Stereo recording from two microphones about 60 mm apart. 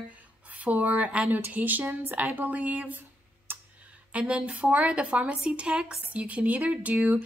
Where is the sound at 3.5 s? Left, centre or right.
Right.